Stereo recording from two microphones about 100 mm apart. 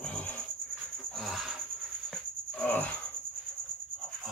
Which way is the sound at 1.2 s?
Centre (ahead or behind).